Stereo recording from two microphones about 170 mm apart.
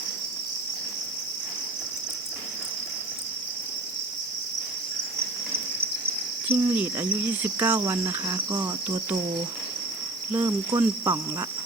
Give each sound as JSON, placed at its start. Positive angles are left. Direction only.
{"t": 6.5, "sound": "cricket", "side_deg": -10}
{"t": 10.3, "sound": "speech", "side_deg": -15}